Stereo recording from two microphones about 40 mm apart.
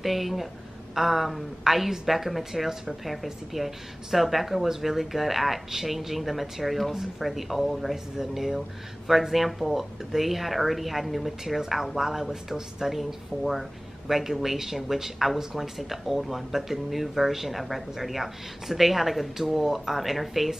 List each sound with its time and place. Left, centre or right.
0.0 s a woman's voice: centre